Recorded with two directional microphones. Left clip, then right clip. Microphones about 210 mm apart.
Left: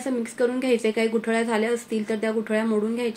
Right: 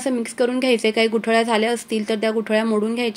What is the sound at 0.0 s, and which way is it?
A woman's voice, 40° right (ahead or behind).